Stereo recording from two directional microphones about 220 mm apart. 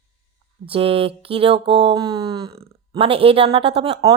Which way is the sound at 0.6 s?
25° right (ahead or behind).